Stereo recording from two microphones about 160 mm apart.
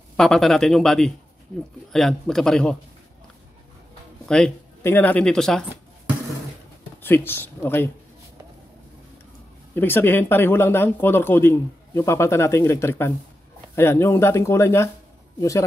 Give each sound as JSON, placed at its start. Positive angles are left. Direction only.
{"t": 0.2, "sound": "a man's voice", "side_deg": 5}
{"t": 4.3, "sound": "a man's voice", "side_deg": 5}
{"t": 7.0, "sound": "speech", "side_deg": 15}
{"t": 9.8, "sound": "speech", "side_deg": 15}